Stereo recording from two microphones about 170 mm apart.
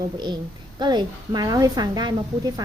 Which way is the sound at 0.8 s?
25° right (ahead or behind).